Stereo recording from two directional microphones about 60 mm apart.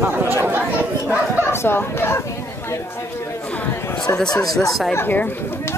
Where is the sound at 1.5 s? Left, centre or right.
Left.